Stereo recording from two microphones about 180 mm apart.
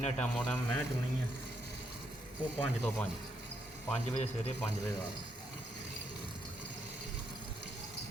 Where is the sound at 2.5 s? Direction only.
10° left (ahead or behind).